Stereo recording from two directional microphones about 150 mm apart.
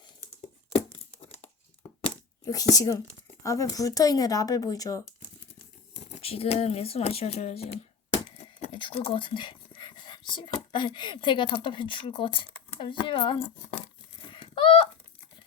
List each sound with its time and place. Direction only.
2.4 s speech: 25° left (ahead or behind)
5.9 s speech: 40° left (ahead or behind)
14.3 s a sound: 35° left (ahead or behind)